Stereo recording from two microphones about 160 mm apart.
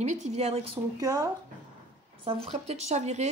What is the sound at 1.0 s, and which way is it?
Speech, 20° right (ahead or behind).